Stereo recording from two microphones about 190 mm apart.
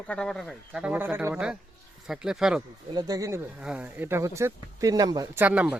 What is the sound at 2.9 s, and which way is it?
Speech, 20° right (ahead or behind).